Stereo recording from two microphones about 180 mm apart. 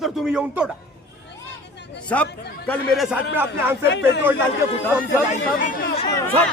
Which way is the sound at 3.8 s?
70° left (ahead or behind).